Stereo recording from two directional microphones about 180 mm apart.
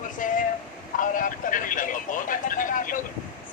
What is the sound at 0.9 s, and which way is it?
Vehicle, 45° left (ahead or behind).